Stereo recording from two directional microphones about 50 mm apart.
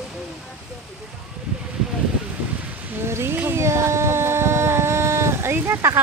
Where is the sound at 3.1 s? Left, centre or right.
Right.